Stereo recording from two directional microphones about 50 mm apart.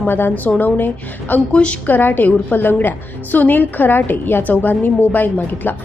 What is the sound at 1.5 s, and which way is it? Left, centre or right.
Speech, left.